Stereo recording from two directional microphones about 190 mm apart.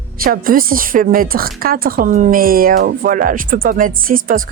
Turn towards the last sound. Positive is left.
turn(degrees=-45)  # may be behind; listen again after turning